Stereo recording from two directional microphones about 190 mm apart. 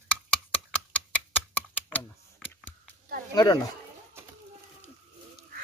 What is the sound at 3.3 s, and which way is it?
Speech, 20° left (ahead or behind).